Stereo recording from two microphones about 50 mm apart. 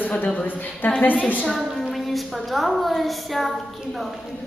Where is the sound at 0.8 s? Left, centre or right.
Left.